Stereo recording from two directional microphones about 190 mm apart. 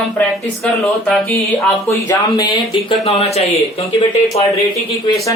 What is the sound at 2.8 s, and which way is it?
Speech, 30° left (ahead or behind).